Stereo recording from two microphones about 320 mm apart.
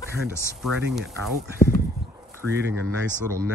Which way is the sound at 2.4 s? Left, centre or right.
Right.